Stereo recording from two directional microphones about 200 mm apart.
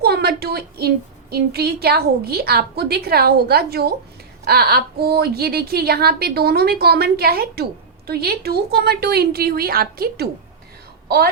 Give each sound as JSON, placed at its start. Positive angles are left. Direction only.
{"t": 0.0, "sound": "a woman's voice", "side_deg": -50}